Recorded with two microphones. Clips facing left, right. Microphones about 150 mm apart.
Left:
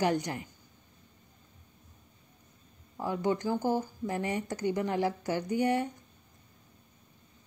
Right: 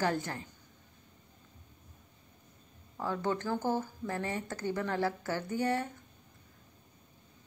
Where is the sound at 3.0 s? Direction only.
15° left (ahead or behind).